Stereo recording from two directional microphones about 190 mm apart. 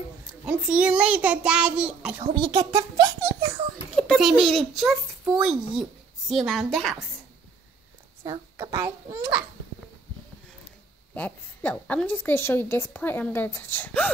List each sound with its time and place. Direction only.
0.3 s a child's voice: 5° right (ahead or behind)
2.3 s a child's voice: 20° right (ahead or behind)
3.9 s a child's voice: centre (ahead or behind)
8.3 s a child's voice: 15° right (ahead or behind)
11.1 s a woman's voice: 10° left (ahead or behind)